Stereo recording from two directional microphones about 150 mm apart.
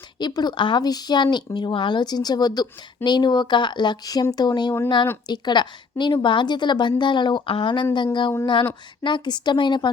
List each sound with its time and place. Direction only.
0.2 s a woman's voice: 30° left (ahead or behind)